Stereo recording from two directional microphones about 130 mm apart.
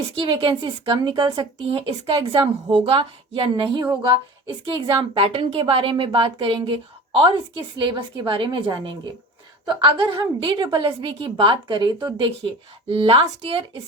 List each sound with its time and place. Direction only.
0.2 s a woman's voice: 40° right (ahead or behind)